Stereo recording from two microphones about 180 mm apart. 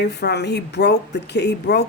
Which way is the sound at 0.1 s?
65° left (ahead or behind).